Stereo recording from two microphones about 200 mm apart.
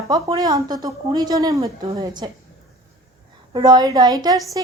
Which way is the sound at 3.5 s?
20° right (ahead or behind).